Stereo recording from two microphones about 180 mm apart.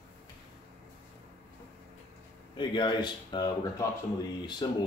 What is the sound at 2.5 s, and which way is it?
Speech, 25° left (ahead or behind).